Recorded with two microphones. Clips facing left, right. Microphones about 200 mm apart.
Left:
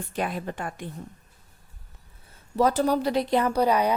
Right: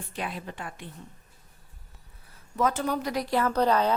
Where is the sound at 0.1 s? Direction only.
45° left (ahead or behind).